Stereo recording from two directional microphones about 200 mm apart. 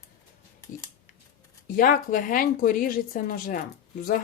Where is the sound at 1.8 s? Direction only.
45° left (ahead or behind).